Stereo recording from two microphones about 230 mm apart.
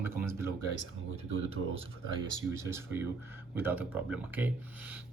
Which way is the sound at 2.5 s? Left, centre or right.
Centre.